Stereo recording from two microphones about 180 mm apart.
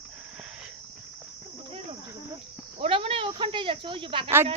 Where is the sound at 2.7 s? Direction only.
30° right (ahead or behind).